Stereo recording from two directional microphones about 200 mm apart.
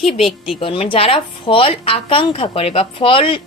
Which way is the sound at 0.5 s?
25° left (ahead or behind).